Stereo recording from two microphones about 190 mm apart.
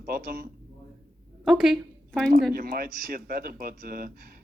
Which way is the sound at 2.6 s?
50° right (ahead or behind).